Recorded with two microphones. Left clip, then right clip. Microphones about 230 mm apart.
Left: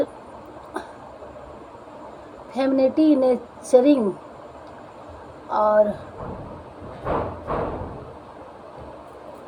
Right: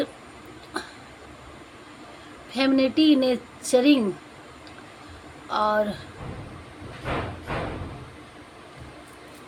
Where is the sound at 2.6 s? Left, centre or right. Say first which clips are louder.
Left 2 dB; right.